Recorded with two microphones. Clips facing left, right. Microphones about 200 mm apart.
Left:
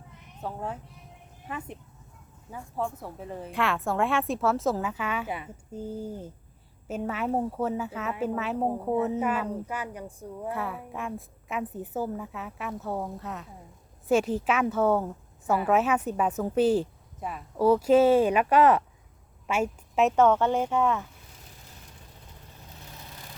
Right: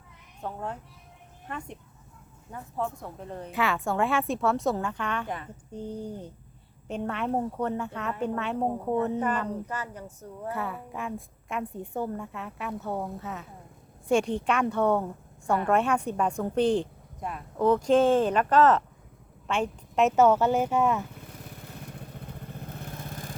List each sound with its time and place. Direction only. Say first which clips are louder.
0.4 s a woman's voice: even; 5° left (ahead or behind)
10.5 s a woman's voice: right 1 dB; centre (ahead or behind)
21.2 s vehicle: right 8 dB; 60° right (ahead or behind)